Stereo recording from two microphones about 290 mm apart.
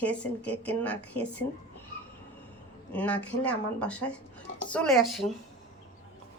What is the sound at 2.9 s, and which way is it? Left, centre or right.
Speech, centre.